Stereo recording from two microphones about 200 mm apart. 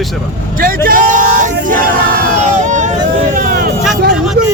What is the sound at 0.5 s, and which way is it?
Speech, 45° right (ahead or behind).